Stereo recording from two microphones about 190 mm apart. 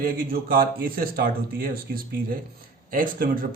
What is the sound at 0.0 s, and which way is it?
A man's voice, 50° right (ahead or behind).